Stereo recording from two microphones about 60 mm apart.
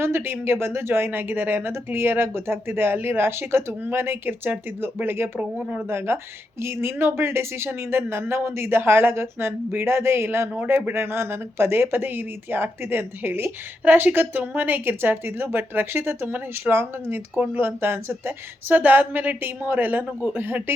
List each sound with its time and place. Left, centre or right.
0.0 s speech: right
5.5 s speech: centre
5.9 s speech: right
18.7 s speech: right